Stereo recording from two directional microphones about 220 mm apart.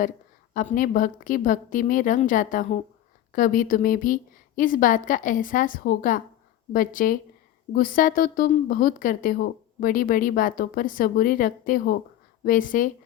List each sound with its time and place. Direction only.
0.5 s speech: 35° left (ahead or behind)